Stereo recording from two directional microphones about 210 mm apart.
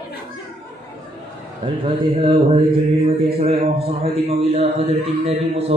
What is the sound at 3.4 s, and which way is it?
Mantra, 30° right (ahead or behind).